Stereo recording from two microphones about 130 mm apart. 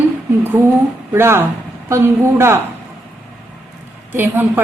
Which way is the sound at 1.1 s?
20° right (ahead or behind).